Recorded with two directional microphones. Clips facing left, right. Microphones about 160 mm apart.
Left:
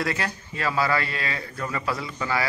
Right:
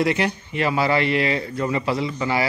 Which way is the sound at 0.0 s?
20° right (ahead or behind).